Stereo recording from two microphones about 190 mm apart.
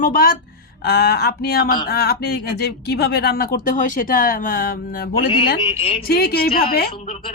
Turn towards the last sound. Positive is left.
turn(degrees=30)  # may be behind; listen again after turning